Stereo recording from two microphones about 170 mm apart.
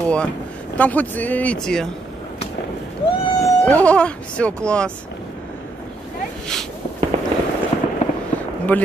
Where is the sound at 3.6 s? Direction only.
10° left (ahead or behind).